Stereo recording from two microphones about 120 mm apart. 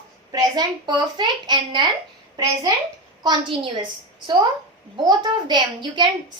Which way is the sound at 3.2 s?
45° right (ahead or behind).